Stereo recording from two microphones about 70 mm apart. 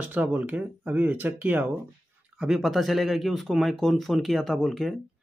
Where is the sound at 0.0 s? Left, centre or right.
Right.